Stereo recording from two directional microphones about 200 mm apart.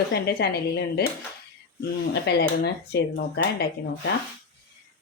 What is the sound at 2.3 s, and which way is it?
A woman's voice, 55° left (ahead or behind).